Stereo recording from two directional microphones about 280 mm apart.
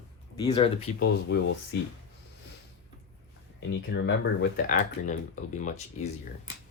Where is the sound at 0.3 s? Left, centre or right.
Centre.